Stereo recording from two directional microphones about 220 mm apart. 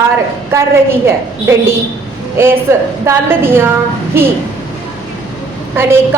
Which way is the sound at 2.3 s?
10° right (ahead or behind).